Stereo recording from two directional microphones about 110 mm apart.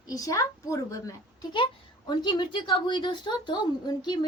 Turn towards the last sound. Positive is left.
turn(degrees=45)  # may be behind; listen again after turning